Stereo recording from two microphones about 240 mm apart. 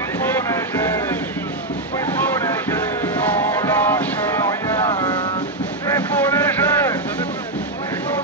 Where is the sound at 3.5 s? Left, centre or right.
Centre.